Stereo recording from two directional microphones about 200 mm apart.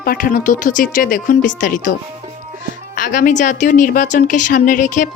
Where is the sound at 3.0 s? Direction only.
40° left (ahead or behind).